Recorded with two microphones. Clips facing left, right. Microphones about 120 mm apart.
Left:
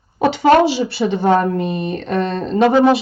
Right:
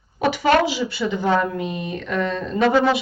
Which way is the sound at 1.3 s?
45° left (ahead or behind).